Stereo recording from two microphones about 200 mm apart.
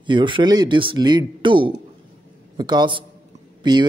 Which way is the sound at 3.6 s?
25° right (ahead or behind).